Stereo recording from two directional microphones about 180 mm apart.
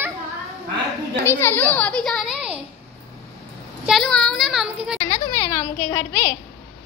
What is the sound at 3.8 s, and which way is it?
Speech, centre (ahead or behind).